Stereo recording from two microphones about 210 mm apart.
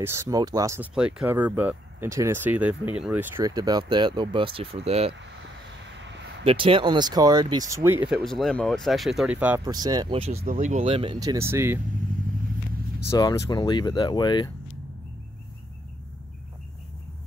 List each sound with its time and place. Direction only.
0.0 s speech: 15° right (ahead or behind); by 5.1 s 30° right (ahead or behind)
6.4 s speech: 25° right (ahead or behind)
8.2 s speech: centre (ahead or behind); by 10.3 s 25° right (ahead or behind)
10.3 s speech: 40° right (ahead or behind); by 11.8 s 10° right (ahead or behind)
13.1 s speech: 20° left (ahead or behind)